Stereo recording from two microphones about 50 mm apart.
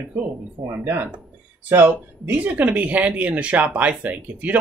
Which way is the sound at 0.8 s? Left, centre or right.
Right.